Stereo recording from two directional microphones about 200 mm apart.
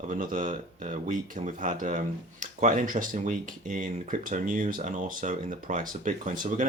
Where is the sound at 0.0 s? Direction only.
40° right (ahead or behind).